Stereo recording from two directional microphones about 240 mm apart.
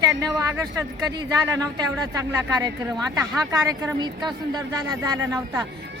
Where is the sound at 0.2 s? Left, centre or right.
Centre.